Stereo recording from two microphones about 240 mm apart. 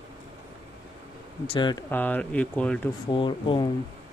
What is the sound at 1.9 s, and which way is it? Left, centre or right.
Speech, centre.